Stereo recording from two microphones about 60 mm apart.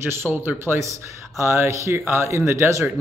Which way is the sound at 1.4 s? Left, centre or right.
Right.